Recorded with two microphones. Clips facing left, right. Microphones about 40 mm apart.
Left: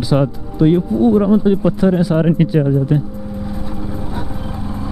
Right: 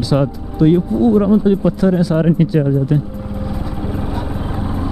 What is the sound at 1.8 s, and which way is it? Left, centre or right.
Speech, centre.